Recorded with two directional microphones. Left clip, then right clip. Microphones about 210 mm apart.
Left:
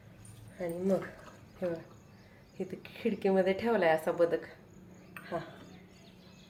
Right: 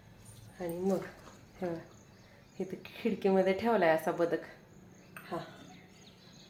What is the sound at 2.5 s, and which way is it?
Speech, 15° right (ahead or behind).